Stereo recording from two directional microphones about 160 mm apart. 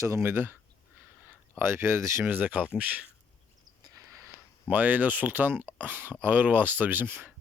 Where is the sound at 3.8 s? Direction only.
20° right (ahead or behind).